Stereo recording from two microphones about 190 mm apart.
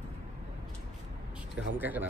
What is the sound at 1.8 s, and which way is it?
Speech, 10° right (ahead or behind).